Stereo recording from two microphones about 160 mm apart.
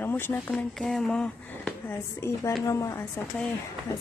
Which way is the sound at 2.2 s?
15° left (ahead or behind).